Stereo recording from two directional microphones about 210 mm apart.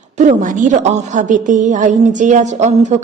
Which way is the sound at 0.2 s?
35° right (ahead or behind).